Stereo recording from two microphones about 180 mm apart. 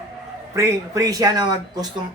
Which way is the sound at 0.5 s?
20° right (ahead or behind).